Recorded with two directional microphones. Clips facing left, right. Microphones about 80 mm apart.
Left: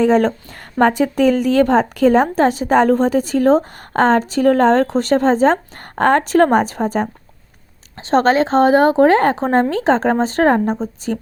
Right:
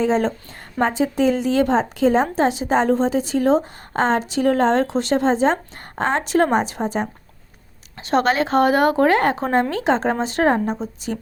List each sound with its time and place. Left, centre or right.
0.0 s a woman's voice: left
7.9 s speech: left